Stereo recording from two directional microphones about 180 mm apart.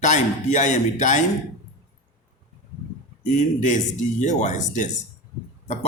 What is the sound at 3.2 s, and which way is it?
A man's voice, 45° left (ahead or behind).